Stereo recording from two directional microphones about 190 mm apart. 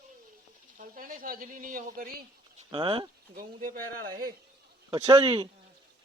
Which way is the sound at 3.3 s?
45° right (ahead or behind).